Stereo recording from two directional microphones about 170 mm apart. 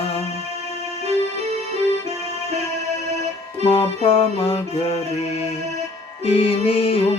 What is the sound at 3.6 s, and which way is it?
Music, 35° left (ahead or behind).